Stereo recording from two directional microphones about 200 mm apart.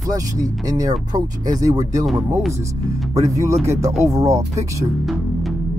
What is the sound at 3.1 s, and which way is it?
Speech, 15° right (ahead or behind).